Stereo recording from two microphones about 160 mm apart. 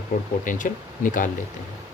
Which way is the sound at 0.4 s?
55° left (ahead or behind).